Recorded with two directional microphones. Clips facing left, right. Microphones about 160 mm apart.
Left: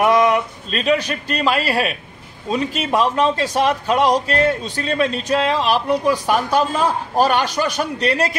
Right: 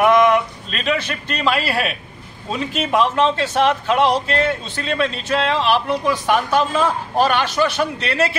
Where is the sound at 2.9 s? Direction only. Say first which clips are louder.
Even; 35° left (ahead or behind).